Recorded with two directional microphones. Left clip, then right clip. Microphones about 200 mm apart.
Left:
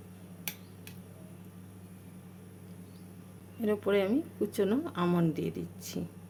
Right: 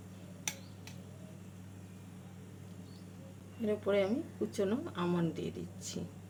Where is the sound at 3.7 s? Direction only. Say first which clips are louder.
Left 3 dB; 40° left (ahead or behind).